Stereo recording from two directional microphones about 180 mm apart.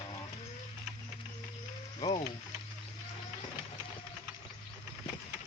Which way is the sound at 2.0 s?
20° left (ahead or behind).